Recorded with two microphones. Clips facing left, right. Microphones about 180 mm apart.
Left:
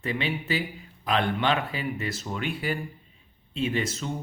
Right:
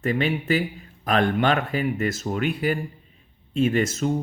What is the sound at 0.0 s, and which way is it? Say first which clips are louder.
Speech: right 6 dB; 45° right (ahead or behind).